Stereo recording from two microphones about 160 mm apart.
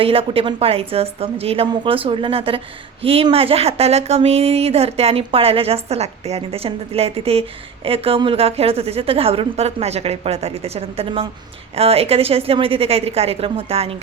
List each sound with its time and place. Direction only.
0.0 s speech: 35° right (ahead or behind)